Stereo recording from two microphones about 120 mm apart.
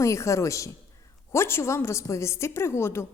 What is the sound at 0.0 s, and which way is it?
A woman's voice, 25° left (ahead or behind).